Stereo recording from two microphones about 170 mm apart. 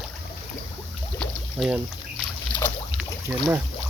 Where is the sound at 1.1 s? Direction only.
Centre (ahead or behind).